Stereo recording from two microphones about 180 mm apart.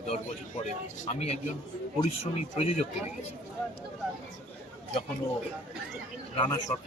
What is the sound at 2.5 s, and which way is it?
Speech, 35° left (ahead or behind).